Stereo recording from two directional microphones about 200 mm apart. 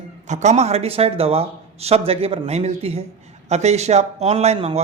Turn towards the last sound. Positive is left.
turn(degrees=-30)  # may be behind; listen again after turning